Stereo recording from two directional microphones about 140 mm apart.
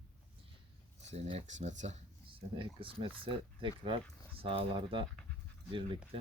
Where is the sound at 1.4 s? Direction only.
60° right (ahead or behind).